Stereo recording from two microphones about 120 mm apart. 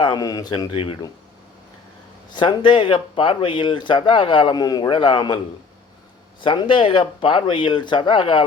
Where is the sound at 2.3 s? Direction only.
40° left (ahead or behind).